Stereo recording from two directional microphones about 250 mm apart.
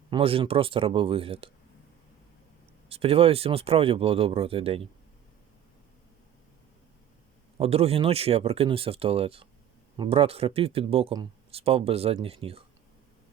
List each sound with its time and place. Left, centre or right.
0.1 s speech: right
2.9 s speech: right
7.6 s speech: right